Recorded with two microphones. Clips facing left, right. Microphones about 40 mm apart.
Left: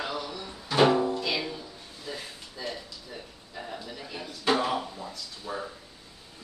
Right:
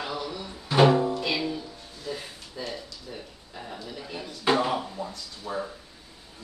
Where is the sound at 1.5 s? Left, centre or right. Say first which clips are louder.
Right 5 dB; centre.